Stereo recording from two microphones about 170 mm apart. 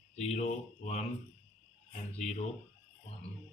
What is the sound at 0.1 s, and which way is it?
Speech, 40° left (ahead or behind).